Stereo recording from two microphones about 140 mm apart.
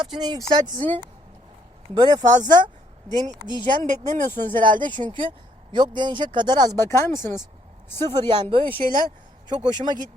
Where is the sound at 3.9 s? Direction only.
60° right (ahead or behind).